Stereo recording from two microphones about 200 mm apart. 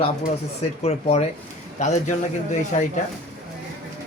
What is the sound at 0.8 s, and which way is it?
Speech, 30° left (ahead or behind).